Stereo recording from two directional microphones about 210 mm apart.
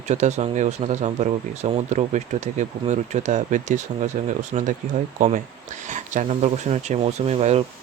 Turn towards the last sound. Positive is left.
turn(degrees=-30)  # may be behind; listen again after turning